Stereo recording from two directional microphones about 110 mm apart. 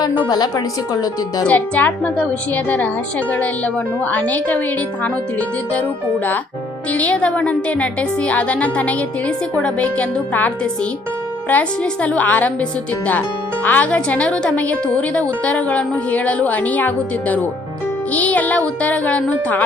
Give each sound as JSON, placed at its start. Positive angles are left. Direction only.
{"t": 0.3, "sound": "a woman's voice", "side_deg": 40}
{"t": 1.5, "sound": "a woman's voice", "side_deg": 15}
{"t": 6.9, "sound": "a woman's voice", "side_deg": 15}
{"t": 13.7, "sound": "a woman's voice", "side_deg": 15}